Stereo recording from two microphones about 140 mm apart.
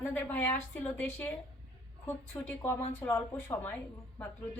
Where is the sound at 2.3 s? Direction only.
10° left (ahead or behind).